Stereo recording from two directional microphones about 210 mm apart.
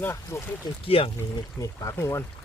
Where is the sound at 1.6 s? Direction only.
15° left (ahead or behind).